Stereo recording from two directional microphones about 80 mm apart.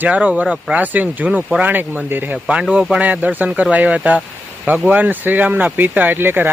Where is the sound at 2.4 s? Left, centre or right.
Centre.